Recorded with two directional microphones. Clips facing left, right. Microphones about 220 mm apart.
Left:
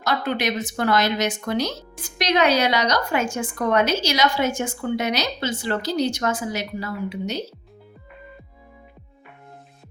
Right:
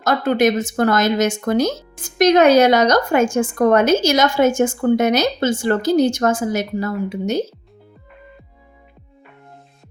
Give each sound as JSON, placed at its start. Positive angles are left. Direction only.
{"t": 0.0, "sound": "speech", "side_deg": -45}